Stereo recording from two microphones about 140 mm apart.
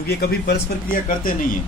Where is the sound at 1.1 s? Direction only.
85° left.